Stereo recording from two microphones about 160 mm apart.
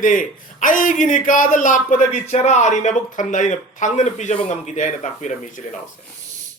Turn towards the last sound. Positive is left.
turn(degrees=50)  # may be behind; listen again after turning